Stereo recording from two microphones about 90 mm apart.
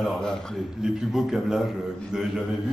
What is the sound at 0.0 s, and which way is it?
Speech, 5° left (ahead or behind).